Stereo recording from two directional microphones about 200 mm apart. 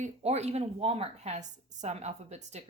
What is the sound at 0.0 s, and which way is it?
A woman's voice, 30° right (ahead or behind).